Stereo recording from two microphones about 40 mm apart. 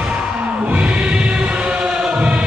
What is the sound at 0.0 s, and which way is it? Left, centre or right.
Music, right.